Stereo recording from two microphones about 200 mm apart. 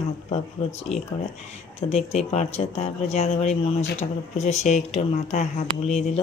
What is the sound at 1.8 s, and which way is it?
Speech, 35° left (ahead or behind).